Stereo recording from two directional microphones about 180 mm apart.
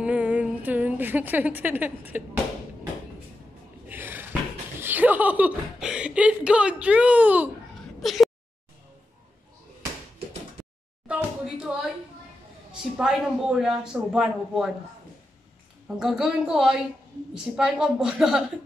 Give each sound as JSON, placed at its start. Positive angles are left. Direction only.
{"t": 0.0, "sound": "a woman's voice", "side_deg": -5}
{"t": 3.9, "sound": "speech", "side_deg": -10}
{"t": 8.0, "sound": "a sound", "side_deg": 0}
{"t": 11.1, "sound": "a sound", "side_deg": -5}
{"t": 11.6, "sound": "speech", "side_deg": -5}
{"t": 12.9, "sound": "speech", "side_deg": -5}
{"t": 16.0, "sound": "speech", "side_deg": -5}